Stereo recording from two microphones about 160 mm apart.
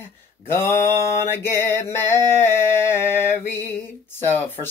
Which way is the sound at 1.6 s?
15° left (ahead or behind).